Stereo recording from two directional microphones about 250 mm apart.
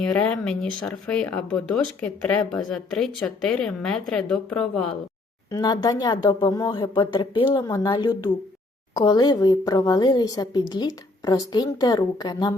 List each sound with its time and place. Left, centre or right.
0.1 s speech: centre
5.5 s a woman's voice: centre